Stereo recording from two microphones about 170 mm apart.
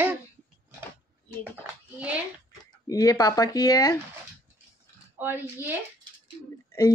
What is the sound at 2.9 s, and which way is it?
Speech, 20° left (ahead or behind).